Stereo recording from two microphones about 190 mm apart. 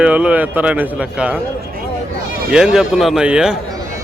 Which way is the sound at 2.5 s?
5° right (ahead or behind).